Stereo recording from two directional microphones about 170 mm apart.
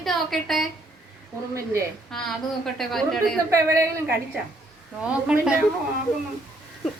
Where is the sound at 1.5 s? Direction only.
15° right (ahead or behind).